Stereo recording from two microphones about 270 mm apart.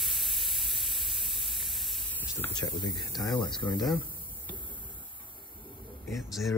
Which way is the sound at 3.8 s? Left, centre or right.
Centre.